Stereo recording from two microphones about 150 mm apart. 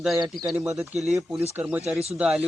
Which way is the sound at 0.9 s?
50° right (ahead or behind).